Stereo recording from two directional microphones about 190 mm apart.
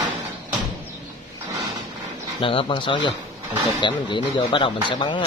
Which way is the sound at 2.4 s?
25° left (ahead or behind).